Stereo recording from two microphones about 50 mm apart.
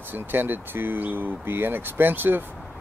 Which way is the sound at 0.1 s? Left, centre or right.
Right.